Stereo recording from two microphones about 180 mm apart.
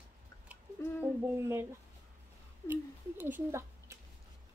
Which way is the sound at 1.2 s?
15° right (ahead or behind).